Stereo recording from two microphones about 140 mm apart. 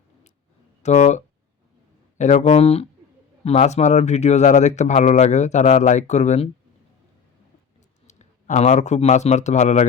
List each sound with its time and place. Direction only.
0.8 s speech: 55° left (ahead or behind)
8.0 s a man's voice: 55° left (ahead or behind)